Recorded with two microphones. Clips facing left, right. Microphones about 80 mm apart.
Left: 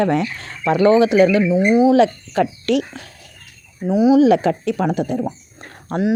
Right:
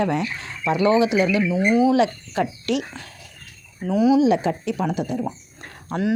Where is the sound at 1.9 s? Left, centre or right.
Left.